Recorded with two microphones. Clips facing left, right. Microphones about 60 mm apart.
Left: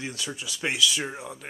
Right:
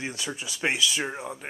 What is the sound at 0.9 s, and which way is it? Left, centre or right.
Speech, centre.